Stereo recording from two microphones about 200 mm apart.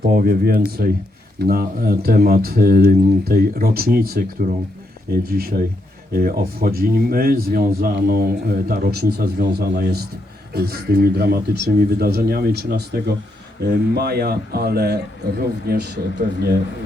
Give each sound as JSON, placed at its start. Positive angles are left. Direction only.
{"t": 0.1, "sound": "a man's voice", "side_deg": -50}